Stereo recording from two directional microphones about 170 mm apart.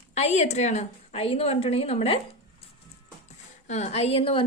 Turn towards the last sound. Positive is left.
turn(degrees=35)  # may be behind; listen again after turning